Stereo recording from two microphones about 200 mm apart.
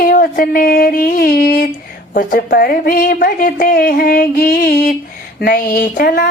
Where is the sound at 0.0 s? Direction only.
45° left (ahead or behind).